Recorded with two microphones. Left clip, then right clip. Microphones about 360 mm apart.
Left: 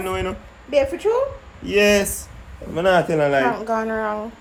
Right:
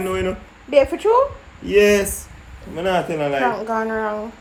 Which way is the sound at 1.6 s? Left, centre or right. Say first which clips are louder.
Right 2 dB; centre.